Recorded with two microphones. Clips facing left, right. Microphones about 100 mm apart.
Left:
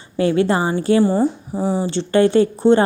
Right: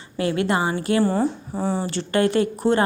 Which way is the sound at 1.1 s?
10° left (ahead or behind).